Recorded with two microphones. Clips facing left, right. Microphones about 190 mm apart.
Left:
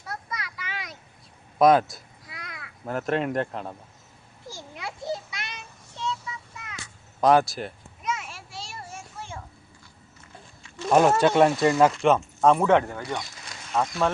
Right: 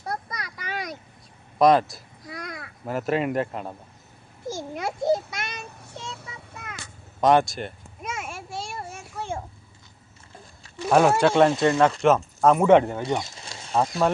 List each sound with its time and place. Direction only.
0.0 s a sound: 40° right (ahead or behind)
1.5 s speech: centre (ahead or behind)
2.2 s babbling: 40° right (ahead or behind)
2.8 s speech: 5° right (ahead or behind)
4.4 s child singing: 45° right (ahead or behind)
7.2 s speech: centre (ahead or behind)
8.0 s a sound: 50° right (ahead or behind)
10.8 s speech: 5° right (ahead or behind)
12.6 s speech: 20° right (ahead or behind)